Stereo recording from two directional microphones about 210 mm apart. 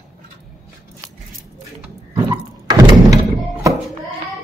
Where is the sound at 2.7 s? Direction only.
20° right (ahead or behind).